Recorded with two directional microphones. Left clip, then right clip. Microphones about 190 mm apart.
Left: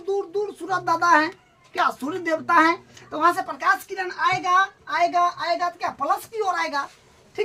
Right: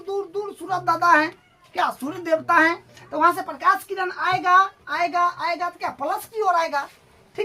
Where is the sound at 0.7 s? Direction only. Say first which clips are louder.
Right 1 dB; 5° left (ahead or behind).